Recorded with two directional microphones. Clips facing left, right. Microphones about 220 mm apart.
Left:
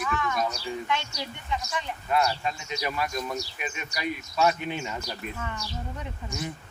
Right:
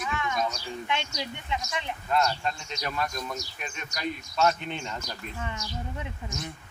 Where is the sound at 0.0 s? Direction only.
15° right (ahead or behind).